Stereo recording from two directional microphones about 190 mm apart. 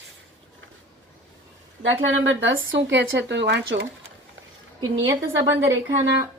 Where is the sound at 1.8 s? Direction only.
80° right; by 3.8 s 65° right (ahead or behind).